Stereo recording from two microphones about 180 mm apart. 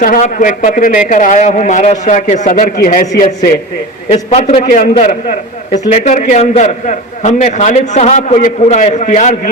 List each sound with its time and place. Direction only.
0.0 s a man's voice: 45° left (ahead or behind)
4.1 s a man's voice: 40° left (ahead or behind)